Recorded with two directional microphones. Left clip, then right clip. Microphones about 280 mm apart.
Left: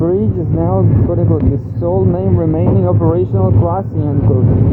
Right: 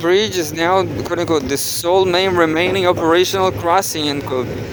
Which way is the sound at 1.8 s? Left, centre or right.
Right.